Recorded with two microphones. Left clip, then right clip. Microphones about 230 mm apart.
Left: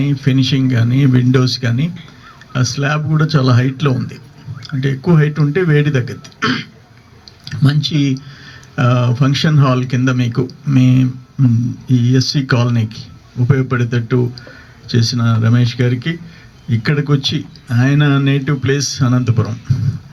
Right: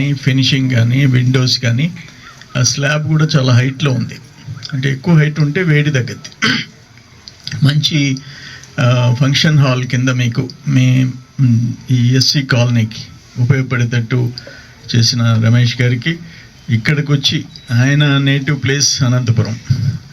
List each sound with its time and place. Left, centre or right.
0.0 s speech: left